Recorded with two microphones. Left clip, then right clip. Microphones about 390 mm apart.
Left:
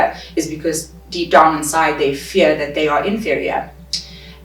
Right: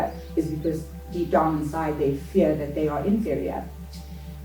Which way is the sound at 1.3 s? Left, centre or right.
Centre.